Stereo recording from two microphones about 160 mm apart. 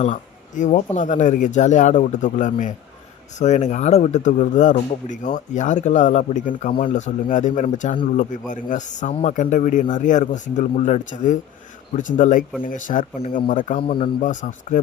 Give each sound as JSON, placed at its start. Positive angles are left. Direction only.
{"t": 0.0, "sound": "speech", "side_deg": 50}
{"t": 14.2, "sound": "speech", "side_deg": 50}